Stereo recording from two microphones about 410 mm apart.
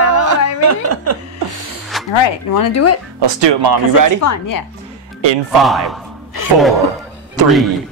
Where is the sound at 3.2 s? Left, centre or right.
Right.